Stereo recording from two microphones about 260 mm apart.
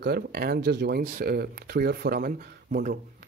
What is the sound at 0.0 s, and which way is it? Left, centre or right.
Speech, right.